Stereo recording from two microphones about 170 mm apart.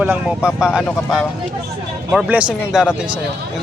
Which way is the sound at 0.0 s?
10° right (ahead or behind).